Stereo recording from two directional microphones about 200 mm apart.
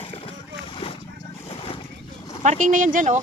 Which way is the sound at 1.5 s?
30° left (ahead or behind).